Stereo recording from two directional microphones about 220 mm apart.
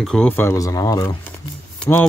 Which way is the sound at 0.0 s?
5° left (ahead or behind).